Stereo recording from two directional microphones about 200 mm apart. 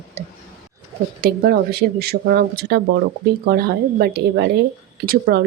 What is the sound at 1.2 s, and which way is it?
Speech, 50° right (ahead or behind).